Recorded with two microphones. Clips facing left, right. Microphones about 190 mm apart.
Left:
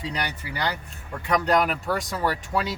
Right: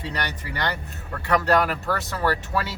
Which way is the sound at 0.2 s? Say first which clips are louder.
Right 1 dB; 10° left (ahead or behind).